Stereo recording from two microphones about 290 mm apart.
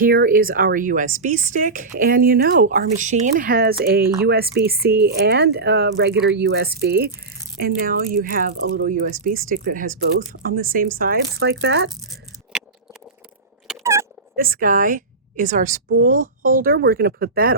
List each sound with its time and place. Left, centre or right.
0.0 s a woman's voice: right
13.7 s squeak: centre
14.3 s a woman's voice: right